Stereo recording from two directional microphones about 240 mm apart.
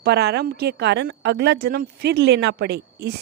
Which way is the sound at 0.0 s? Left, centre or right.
Right.